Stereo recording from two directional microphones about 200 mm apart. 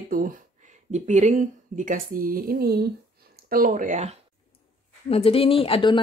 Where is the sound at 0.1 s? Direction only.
45° right (ahead or behind).